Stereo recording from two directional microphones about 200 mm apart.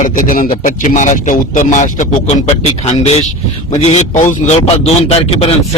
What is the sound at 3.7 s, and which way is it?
A man's voice, 35° left (ahead or behind).